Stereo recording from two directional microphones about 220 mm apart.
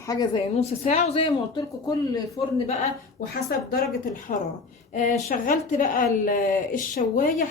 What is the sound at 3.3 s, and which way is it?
Speech, 45° left (ahead or behind).